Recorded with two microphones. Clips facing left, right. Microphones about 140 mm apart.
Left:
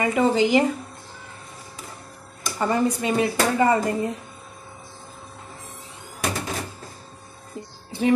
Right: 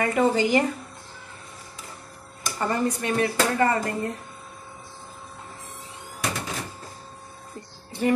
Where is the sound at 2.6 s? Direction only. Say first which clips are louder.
Left 3 dB; 15° left (ahead or behind).